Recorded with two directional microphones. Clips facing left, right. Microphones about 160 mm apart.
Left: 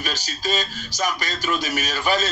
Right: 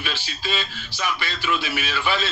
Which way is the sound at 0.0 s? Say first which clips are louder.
Left 2 dB; 40° left (ahead or behind).